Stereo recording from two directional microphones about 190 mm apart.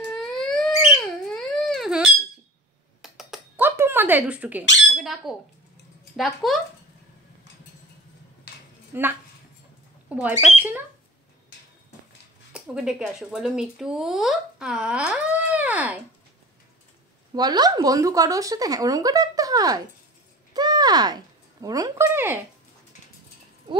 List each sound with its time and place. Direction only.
0.2 s wail: 5° left (ahead or behind)
1.2 s a sound: 5° left (ahead or behind)
4.9 s speech: centre (ahead or behind)
8.9 s speech: 10° right (ahead or behind)
12.5 s speech: 5° right (ahead or behind)
17.3 s speech: 20° right (ahead or behind)